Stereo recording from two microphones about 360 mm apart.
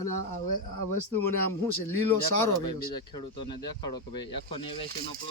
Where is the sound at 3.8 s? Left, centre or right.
Centre.